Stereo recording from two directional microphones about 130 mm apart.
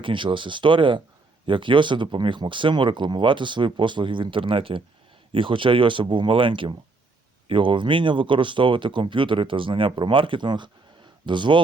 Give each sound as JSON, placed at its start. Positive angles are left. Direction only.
{"t": 0.0, "sound": "speech", "side_deg": -40}